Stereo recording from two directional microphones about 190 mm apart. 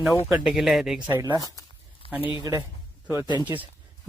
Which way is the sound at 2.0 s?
30° left (ahead or behind).